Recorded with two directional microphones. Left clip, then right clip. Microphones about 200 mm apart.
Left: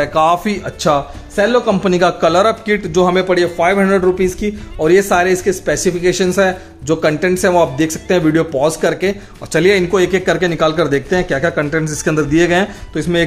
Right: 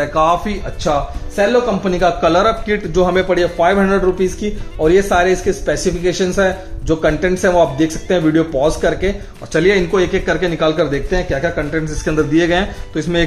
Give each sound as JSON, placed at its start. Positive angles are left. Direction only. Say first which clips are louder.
{"t": 0.0, "sound": "speech", "louder": "left 1 dB", "side_deg": 25}
{"t": 0.5, "sound": "speech", "louder": "left 3 dB", "side_deg": 45}